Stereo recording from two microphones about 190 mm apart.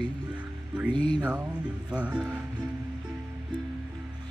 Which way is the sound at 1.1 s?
15° right (ahead or behind).